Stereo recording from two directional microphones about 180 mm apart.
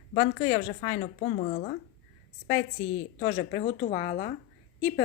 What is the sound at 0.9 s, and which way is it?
Speech, 50° left (ahead or behind).